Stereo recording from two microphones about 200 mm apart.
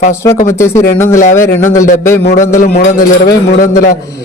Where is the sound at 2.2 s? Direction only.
50° left (ahead or behind).